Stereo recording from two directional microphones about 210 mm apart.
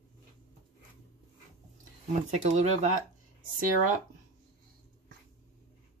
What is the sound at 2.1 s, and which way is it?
Speech, 35° right (ahead or behind).